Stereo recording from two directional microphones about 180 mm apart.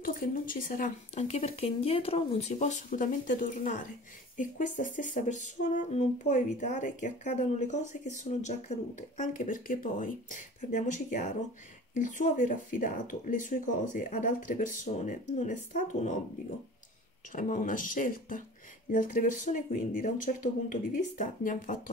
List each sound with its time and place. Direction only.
0.0 s speech: 50° left (ahead or behind)
17.3 s speech: 45° left (ahead or behind)